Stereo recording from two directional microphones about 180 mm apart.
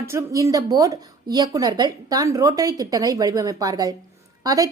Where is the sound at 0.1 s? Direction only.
15° right (ahead or behind).